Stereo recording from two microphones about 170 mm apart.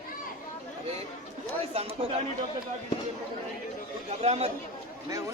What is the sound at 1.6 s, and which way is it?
Chatter, 35° right (ahead or behind).